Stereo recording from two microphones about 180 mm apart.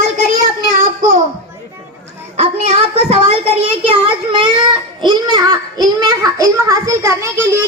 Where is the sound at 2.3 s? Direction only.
35° right (ahead or behind).